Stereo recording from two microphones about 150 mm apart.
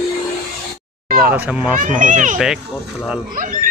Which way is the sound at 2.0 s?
60° right (ahead or behind).